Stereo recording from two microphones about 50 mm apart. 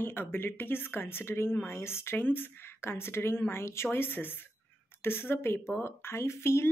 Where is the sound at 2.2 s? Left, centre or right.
Left.